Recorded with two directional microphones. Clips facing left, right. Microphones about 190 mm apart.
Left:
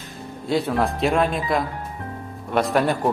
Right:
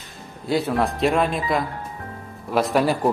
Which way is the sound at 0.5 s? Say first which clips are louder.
Even; centre (ahead or behind).